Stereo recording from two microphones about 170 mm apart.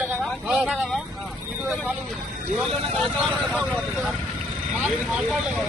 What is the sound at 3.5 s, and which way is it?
Speech, centre (ahead or behind).